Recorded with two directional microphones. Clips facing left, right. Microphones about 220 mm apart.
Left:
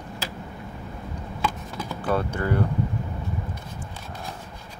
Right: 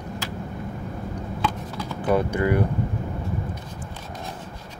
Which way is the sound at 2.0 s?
10° right (ahead or behind).